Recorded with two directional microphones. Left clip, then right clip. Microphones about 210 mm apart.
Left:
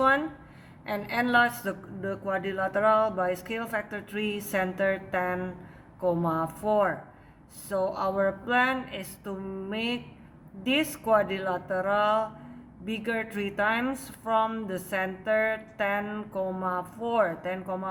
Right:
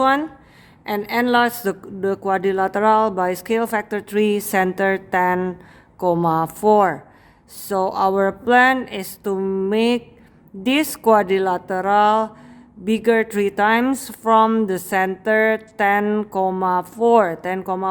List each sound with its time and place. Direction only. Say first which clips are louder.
0.0 s a woman's voice: right 6 dB; 50° right (ahead or behind)